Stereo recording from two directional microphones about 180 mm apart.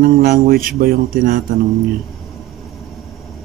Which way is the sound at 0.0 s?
55° right (ahead or behind).